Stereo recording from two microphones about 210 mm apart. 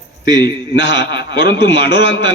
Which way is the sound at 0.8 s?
55° left (ahead or behind).